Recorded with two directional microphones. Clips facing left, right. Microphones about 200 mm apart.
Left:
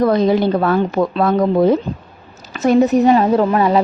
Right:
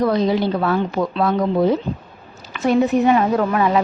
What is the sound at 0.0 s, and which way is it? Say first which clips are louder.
A woman's voice: left 4 dB; 50° left (ahead or behind).